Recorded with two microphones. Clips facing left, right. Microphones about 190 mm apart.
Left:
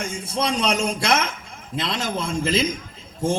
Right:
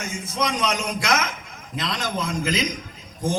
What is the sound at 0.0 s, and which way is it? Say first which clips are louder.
A man's voice: left 2 dB; 30° left (ahead or behind).